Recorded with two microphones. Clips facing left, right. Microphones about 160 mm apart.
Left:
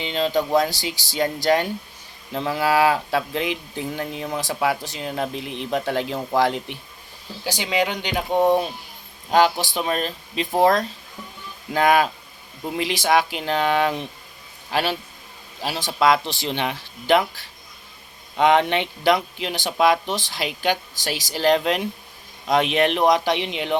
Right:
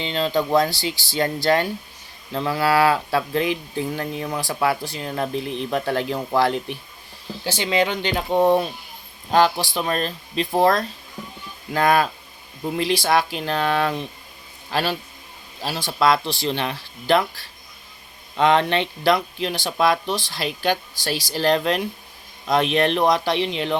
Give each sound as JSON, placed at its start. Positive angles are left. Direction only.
{"t": 0.0, "sound": "a man's voice", "side_deg": 15}